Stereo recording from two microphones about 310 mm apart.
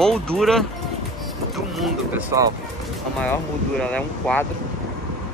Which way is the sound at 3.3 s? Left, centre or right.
Centre.